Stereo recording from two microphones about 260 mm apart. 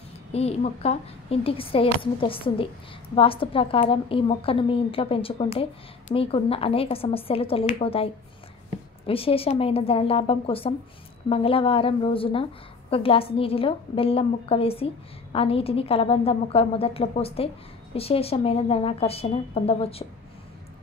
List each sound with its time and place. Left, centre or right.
0.3 s a woman's voice: left